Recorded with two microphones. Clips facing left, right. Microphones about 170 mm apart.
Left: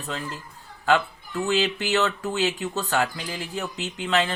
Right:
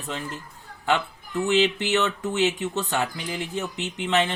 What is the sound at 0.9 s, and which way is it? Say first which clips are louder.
Speech: left 3 dB; 20° right (ahead or behind).